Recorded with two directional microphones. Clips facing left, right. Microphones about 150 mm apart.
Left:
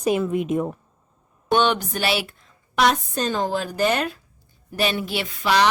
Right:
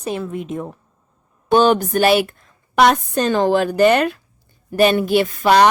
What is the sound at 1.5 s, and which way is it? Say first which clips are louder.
A woman's voice: right 7 dB; 40° right (ahead or behind).